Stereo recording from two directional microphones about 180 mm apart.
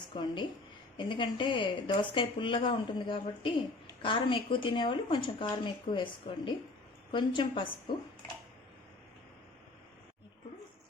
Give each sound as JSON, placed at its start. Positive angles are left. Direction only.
{"t": 0.1, "sound": "a woman's voice", "side_deg": 25}